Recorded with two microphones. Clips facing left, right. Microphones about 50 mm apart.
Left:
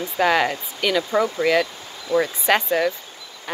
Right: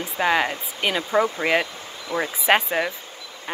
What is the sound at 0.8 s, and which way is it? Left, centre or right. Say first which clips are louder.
Speech: left 1 dB; right.